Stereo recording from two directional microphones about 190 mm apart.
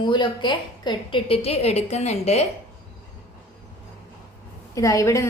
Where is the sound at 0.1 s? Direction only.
25° left (ahead or behind).